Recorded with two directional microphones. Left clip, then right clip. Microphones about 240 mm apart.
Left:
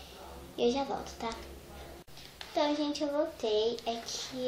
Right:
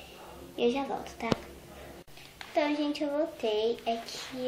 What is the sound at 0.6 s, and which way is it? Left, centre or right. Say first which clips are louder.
Speech: right 1 dB; centre.